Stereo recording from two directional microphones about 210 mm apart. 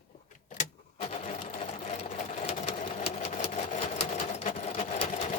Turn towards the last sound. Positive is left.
turn(degrees=35)  # may be behind; listen again after turning